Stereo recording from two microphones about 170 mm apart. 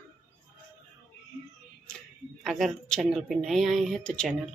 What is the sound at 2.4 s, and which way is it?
Speech, centre (ahead or behind).